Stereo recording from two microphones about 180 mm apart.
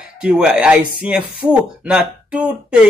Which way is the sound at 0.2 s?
5° right (ahead or behind).